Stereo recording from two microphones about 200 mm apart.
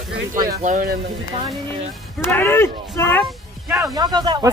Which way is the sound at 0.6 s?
40° right (ahead or behind).